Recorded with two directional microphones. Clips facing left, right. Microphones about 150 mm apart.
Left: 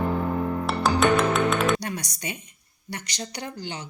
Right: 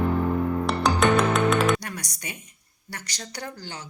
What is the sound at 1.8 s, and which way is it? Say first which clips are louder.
Music: left 4 dB; 25° left (ahead or behind).